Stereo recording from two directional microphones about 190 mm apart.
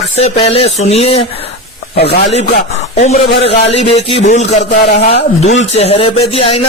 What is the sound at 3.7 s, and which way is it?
Speech, 35° left (ahead or behind).